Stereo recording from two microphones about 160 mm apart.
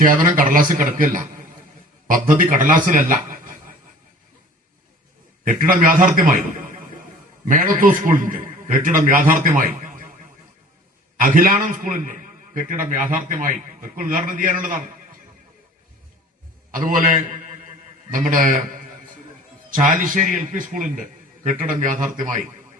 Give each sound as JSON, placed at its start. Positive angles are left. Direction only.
{"t": 0.3, "sound": "a man's voice", "side_deg": -60}
{"t": 5.5, "sound": "a man's voice", "side_deg": -60}
{"t": 7.4, "sound": "a man's voice", "side_deg": -55}
{"t": 11.2, "sound": "a man's voice", "side_deg": -55}
{"t": 16.7, "sound": "a man's voice", "side_deg": -55}
{"t": 19.7, "sound": "a man's voice", "side_deg": -55}